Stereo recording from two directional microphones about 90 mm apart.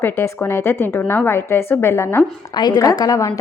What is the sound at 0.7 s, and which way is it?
A woman's voice, 25° left (ahead or behind).